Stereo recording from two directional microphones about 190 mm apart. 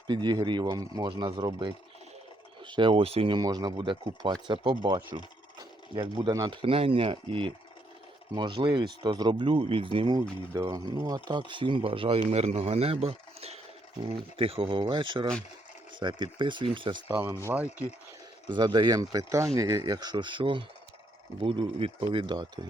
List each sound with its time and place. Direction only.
0.1 s speech: 25° right (ahead or behind)
17.1 s speech: 10° right (ahead or behind)
18.4 s speech: 25° right (ahead or behind)